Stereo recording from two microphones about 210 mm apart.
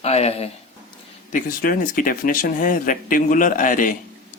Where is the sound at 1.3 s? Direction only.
40° left (ahead or behind).